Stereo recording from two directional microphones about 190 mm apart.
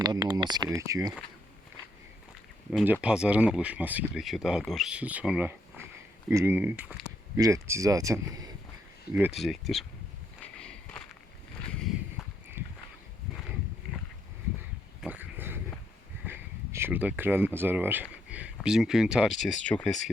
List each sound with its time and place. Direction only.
0.0 s speech: 20° right (ahead or behind)
2.7 s speech: 5° right (ahead or behind)
9.1 s speech: 5° right (ahead or behind)
10.4 s walk: 5° left (ahead or behind)
12.6 s a sound: 10° right (ahead or behind)
15.0 s dog: 10° right (ahead or behind)
16.2 s a sound: 10° right (ahead or behind)
18.6 s speech: 5° right (ahead or behind)